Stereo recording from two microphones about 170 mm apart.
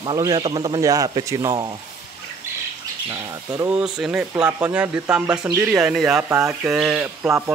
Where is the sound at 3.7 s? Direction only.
5° right (ahead or behind).